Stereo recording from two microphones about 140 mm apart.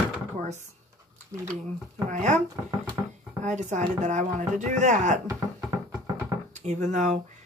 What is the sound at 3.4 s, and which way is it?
Speech, 60° right (ahead or behind).